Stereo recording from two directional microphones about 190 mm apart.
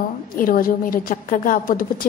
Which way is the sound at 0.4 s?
50° left (ahead or behind).